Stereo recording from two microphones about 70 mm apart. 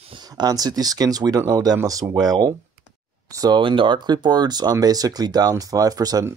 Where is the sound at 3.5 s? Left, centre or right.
Right.